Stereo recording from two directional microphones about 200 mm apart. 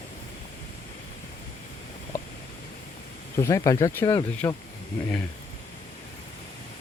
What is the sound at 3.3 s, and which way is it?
Speech, 15° left (ahead or behind).